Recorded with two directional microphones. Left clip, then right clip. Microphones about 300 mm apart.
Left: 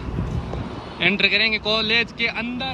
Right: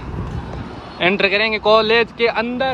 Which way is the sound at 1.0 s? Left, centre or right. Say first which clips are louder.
Right 2 dB; centre.